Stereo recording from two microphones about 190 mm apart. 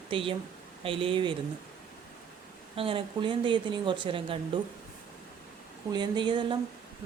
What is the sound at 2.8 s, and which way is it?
Speech, 30° right (ahead or behind).